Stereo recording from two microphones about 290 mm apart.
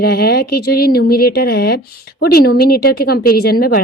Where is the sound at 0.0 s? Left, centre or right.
Left.